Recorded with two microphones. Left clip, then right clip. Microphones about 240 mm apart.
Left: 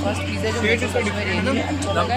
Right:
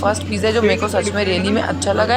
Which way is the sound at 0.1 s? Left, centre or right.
Centre.